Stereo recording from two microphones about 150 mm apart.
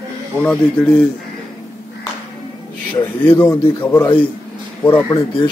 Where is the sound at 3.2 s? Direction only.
30° left (ahead or behind).